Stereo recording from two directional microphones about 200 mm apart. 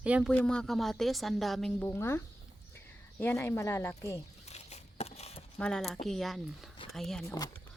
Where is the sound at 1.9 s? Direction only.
15° left (ahead or behind).